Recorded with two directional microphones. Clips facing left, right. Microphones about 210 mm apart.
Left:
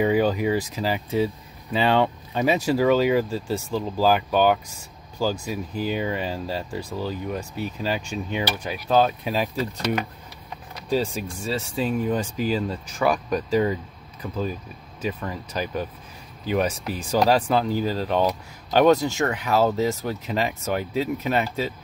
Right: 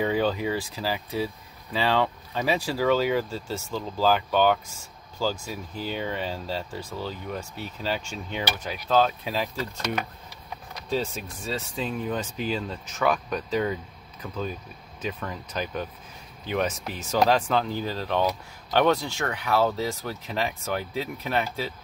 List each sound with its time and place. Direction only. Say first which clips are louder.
0.0 s speech: left 4 dB; 10° left (ahead or behind)
10.9 s speech: left 4 dB; 15° left (ahead or behind)
17.0 s speech: left 2 dB; 10° left (ahead or behind)